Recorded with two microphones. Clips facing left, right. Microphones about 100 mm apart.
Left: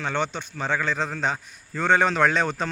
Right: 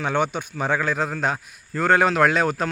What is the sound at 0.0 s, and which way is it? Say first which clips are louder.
A man's voice: right 4 dB; 10° right (ahead or behind).